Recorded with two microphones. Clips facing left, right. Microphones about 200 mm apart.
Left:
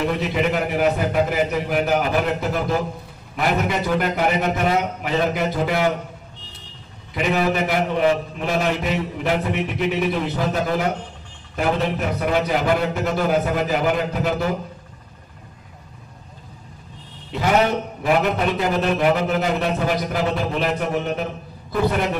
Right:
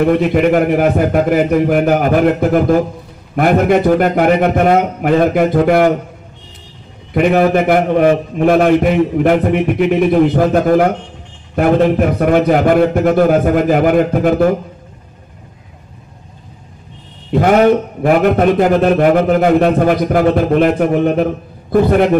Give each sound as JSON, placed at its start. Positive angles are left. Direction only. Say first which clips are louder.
{"t": 0.0, "sound": "a man's voice", "louder": "right 10 dB", "side_deg": -55}
{"t": 7.2, "sound": "a man's voice", "louder": "right 9 dB", "side_deg": -50}
{"t": 17.3, "sound": "a man's voice", "louder": "right 9 dB", "side_deg": -50}